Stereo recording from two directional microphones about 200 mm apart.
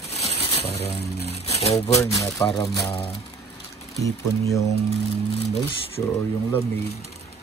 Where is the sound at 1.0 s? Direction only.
30° left (ahead or behind).